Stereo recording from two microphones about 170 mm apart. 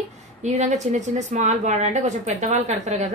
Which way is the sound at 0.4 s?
45° right (ahead or behind).